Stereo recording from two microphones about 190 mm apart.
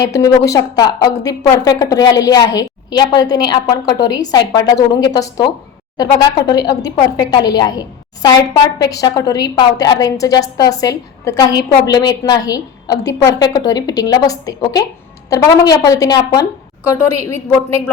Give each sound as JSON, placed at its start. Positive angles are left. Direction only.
{"t": 0.0, "sound": "a woman's voice", "side_deg": 15}